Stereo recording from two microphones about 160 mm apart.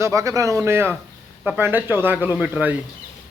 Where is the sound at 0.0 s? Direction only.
20° right (ahead or behind).